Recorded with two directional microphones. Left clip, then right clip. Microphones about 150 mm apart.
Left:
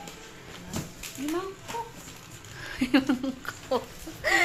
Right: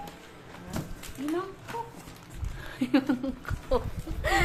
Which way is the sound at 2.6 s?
5° left (ahead or behind).